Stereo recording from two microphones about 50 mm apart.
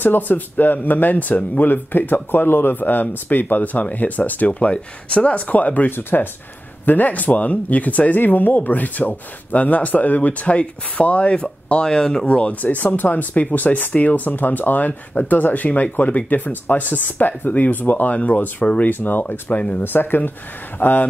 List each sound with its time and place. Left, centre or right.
0.0 s speech: left
11.3 s speech: centre
12.3 s speech: left
19.8 s speech: left